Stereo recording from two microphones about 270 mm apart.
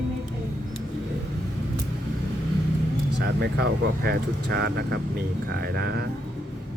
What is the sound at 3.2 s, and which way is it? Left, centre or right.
Speech, right.